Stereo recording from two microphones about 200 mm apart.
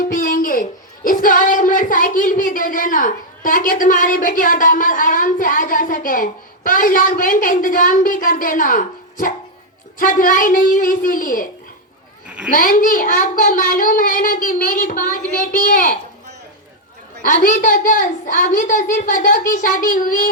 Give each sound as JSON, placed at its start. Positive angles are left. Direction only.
{"t": 0.0, "sound": "a child's voice", "side_deg": 40}
{"t": 12.5, "sound": "a child's voice", "side_deg": 45}
{"t": 17.2, "sound": "a woman's voice", "side_deg": 40}